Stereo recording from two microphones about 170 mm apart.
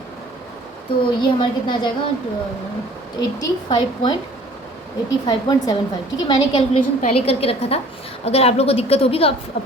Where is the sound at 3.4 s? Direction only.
25° left (ahead or behind).